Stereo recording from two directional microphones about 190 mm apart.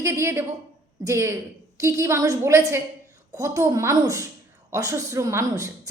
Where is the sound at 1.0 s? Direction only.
15° right (ahead or behind).